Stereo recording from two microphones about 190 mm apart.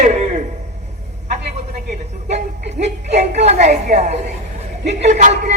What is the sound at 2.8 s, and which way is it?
A man's voice, 35° right (ahead or behind).